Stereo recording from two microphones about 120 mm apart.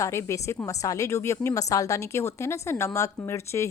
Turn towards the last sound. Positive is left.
turn(degrees=25)  # may be behind; listen again after turning